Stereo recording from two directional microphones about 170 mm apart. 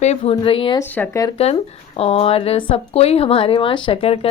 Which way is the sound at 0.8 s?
10° left (ahead or behind).